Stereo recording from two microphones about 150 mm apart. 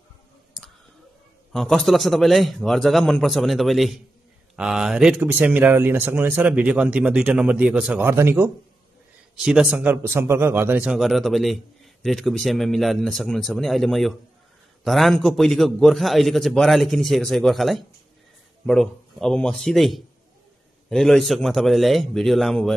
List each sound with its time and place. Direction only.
1.5 s a man's voice: 5° left (ahead or behind)
8.1 s speech: 15° right (ahead or behind)
9.4 s a man's voice: 5° right (ahead or behind)